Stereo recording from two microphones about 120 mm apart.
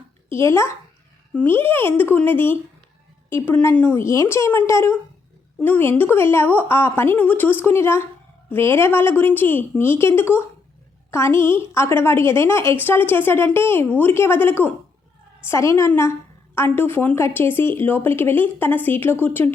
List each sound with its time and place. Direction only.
0.3 s a woman's voice: 20° left (ahead or behind)